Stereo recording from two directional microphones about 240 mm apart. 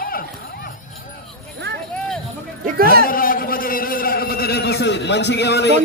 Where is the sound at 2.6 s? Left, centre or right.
Right.